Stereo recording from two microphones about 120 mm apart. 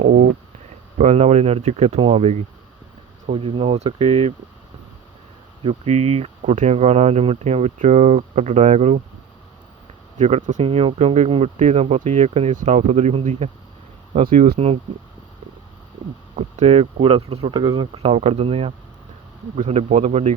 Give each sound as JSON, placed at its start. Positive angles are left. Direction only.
{"t": 0.9, "sound": "speech", "side_deg": -70}
{"t": 2.0, "sound": "speech", "side_deg": -50}
{"t": 5.6, "sound": "speech", "side_deg": -60}
{"t": 10.2, "sound": "speech", "side_deg": -65}
{"t": 10.7, "sound": "speech", "side_deg": -55}
{"t": 16.3, "sound": "speech", "side_deg": -65}
{"t": 18.1, "sound": "speech", "side_deg": -60}